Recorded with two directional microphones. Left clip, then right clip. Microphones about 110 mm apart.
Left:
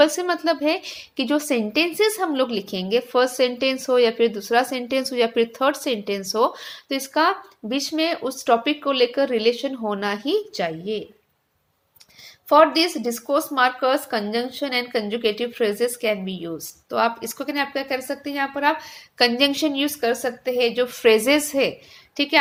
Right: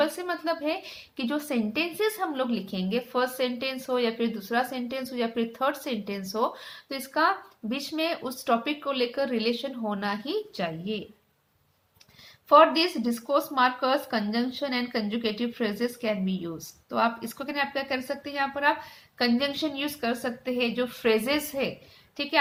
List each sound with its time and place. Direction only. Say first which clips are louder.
0.0 s a woman's voice: left 9 dB; 40° left (ahead or behind); by 11.0 s 25° left (ahead or behind)
12.5 s a woman's voice: left 3 dB; 25° left (ahead or behind)
19.2 s a woman's voice: left 8 dB; 50° left (ahead or behind)